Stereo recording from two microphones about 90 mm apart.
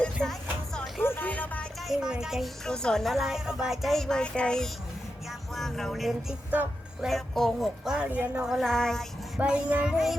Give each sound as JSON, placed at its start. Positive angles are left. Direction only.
{"t": 0.0, "sound": "music", "side_deg": 5}
{"t": 1.0, "sound": "music", "side_deg": 25}
{"t": 1.9, "sound": "speech", "side_deg": -5}
{"t": 2.6, "sound": "speech", "side_deg": 10}
{"t": 7.9, "sound": "child singing", "side_deg": -10}
{"t": 8.4, "sound": "speech", "side_deg": 0}
{"t": 9.4, "sound": "child singing", "side_deg": -15}